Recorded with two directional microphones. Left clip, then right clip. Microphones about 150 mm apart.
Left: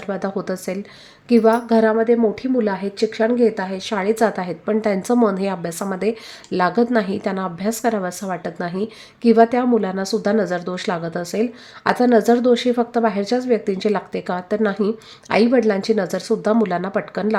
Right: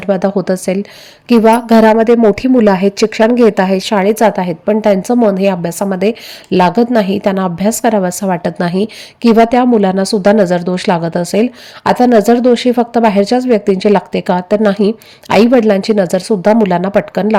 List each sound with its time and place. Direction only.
0.0 s a woman's voice: 40° right (ahead or behind)